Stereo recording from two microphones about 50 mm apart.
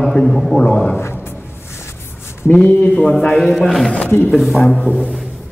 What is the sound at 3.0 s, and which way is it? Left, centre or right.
Speech, centre.